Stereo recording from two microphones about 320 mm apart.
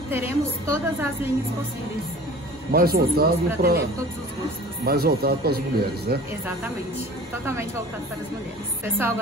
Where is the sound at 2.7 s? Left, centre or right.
Right.